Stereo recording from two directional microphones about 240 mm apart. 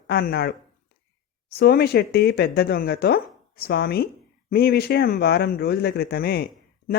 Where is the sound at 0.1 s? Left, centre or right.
Left.